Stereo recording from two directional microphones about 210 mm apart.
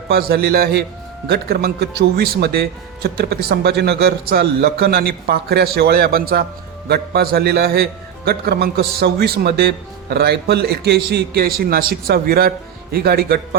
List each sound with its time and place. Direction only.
0.1 s a man's voice: 50° right (ahead or behind)